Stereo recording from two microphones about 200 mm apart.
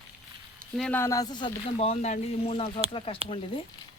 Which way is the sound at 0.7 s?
5° left (ahead or behind).